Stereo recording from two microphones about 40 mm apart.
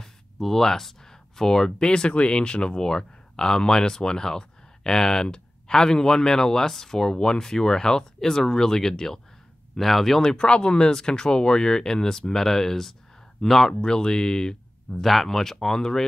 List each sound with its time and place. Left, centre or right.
0.0 s speech: centre
10.3 s speech: left
15.0 s speech: centre